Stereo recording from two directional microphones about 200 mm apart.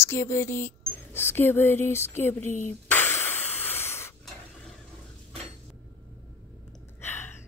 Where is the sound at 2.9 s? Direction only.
10° left (ahead or behind).